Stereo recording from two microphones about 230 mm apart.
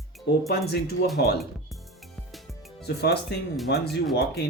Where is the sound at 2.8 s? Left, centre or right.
Left.